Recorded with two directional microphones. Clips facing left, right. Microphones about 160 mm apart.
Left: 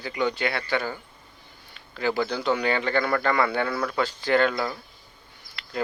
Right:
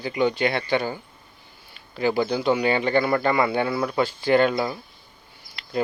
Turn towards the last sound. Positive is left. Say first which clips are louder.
# even
turn(degrees=-15)  # may be behind; listen again after turning